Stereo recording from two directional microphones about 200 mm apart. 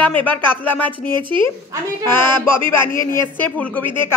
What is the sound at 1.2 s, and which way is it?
Speech, 25° right (ahead or behind).